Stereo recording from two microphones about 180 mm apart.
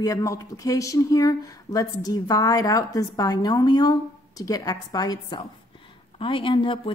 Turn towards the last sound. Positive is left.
turn(degrees=30)  # may be behind; listen again after turning